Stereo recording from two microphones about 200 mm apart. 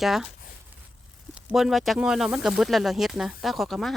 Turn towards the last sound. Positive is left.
turn(degrees=0)  # may be behind; listen again after turning